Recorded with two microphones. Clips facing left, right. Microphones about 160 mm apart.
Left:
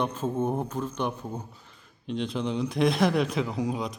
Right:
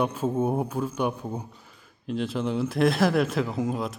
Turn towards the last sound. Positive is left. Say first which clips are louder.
# right 2 dB
turn(degrees=0)  # may be behind; listen again after turning